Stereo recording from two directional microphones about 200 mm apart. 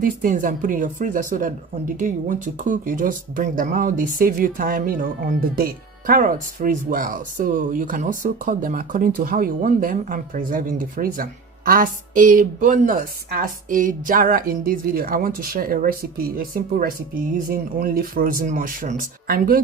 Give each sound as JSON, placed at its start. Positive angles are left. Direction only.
{"t": 0.0, "sound": "speech", "side_deg": -45}